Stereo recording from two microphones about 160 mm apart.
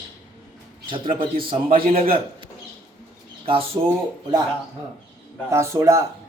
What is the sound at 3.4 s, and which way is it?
Speech, 35° right (ahead or behind).